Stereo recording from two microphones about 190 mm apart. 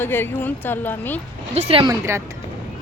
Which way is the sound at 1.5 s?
35° right (ahead or behind).